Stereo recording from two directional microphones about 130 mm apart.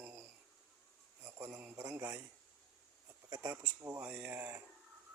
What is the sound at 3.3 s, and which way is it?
Speech, 20° right (ahead or behind).